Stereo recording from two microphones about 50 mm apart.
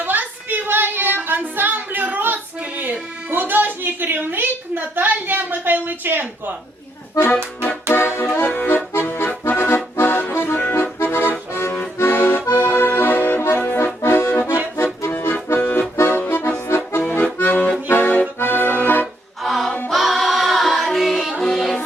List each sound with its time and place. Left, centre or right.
0.0 s child singing: right
7.9 s accordion: left
17.0 s accordion: left
19.4 s music: centre